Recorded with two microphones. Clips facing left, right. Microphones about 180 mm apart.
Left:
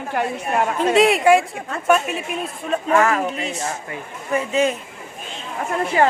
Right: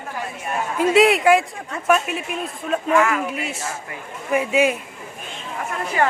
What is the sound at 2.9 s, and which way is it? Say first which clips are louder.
Speech: left 2 dB; 40° left (ahead or behind).